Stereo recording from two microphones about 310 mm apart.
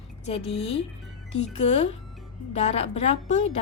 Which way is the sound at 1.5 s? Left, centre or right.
Left.